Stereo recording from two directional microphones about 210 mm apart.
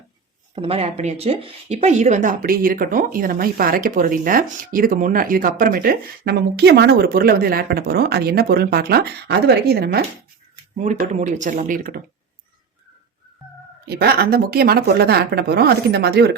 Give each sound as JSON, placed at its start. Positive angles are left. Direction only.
{"t": 0.5, "sound": "speech", "side_deg": -25}
{"t": 10.8, "sound": "speech", "side_deg": -35}
{"t": 13.8, "sound": "speech", "side_deg": -50}